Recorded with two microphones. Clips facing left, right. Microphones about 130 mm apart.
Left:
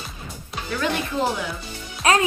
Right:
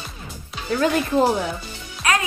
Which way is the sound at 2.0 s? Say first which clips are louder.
Left 3 dB; 30° left (ahead or behind).